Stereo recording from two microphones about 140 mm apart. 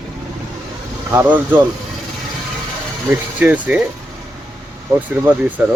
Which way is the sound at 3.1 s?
10° right (ahead or behind).